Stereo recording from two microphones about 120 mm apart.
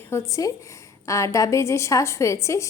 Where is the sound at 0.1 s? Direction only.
25° left (ahead or behind).